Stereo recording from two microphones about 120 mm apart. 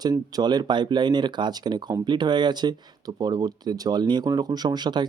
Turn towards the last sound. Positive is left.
turn(degrees=-35)  # may be behind; listen again after turning